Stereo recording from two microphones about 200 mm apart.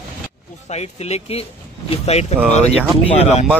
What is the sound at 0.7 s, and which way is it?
Speech, 30° left (ahead or behind).